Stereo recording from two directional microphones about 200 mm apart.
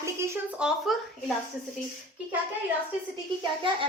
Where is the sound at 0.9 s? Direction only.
Centre (ahead or behind).